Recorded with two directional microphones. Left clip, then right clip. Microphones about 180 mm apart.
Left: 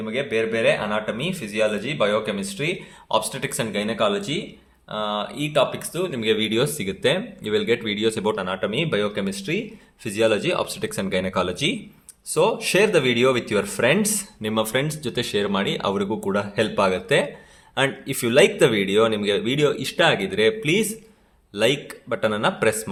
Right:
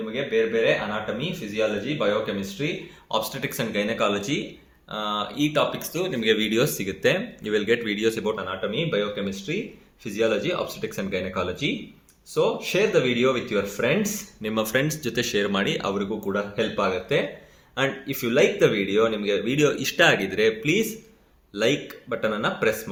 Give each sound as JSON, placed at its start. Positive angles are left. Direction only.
{"t": 0.0, "sound": "speech", "side_deg": 55}
{"t": 8.2, "sound": "speech", "side_deg": 50}